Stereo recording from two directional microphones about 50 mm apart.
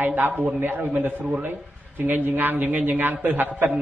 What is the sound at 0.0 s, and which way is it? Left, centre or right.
A man's voice, right.